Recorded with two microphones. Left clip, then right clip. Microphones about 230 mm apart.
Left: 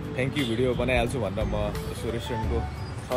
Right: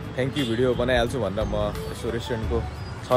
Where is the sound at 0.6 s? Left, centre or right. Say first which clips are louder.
Right 4 dB; right.